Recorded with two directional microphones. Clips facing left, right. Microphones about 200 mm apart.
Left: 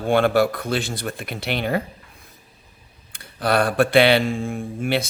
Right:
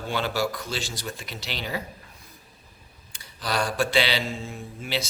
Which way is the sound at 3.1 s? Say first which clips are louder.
Left 9 dB; 55° left (ahead or behind).